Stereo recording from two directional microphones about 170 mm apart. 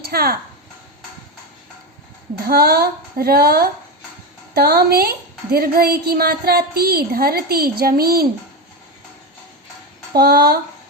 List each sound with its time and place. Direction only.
0.0 s speech: 65° right (ahead or behind)
2.4 s a woman's voice: 65° right (ahead or behind)
10.2 s a woman's voice: 65° right (ahead or behind)